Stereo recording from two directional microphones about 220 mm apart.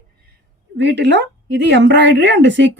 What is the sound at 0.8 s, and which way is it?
A woman's voice, 55° right (ahead or behind).